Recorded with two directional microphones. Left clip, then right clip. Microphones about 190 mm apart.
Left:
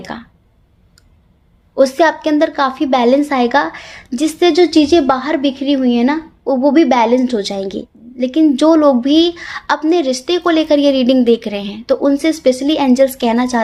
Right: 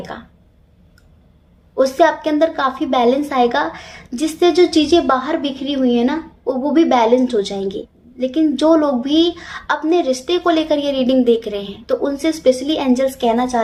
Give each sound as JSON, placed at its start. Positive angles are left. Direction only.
{"t": 1.7, "sound": "a woman's voice", "side_deg": 45}